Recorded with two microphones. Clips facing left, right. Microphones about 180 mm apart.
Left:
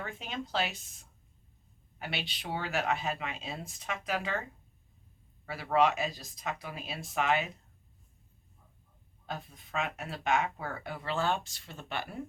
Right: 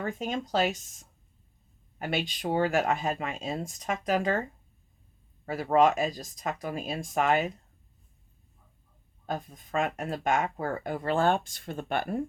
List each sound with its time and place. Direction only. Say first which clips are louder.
0.0 s speech: right 7 dB; 45° right (ahead or behind)
5.6 s speech: right 4 dB; 45° right (ahead or behind)
9.2 s speech: right 7 dB; 45° right (ahead or behind)